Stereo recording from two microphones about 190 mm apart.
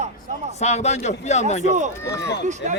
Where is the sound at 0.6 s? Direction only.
35° left (ahead or behind).